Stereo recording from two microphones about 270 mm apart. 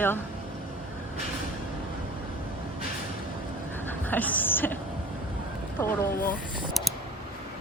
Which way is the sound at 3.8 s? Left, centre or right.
Centre.